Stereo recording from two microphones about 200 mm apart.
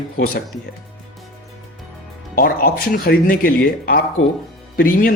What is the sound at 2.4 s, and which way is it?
Speech, 45° left (ahead or behind).